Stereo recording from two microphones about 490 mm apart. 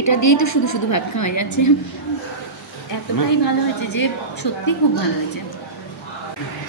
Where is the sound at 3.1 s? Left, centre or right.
Left.